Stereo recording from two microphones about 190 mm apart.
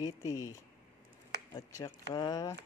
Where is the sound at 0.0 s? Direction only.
15° left (ahead or behind).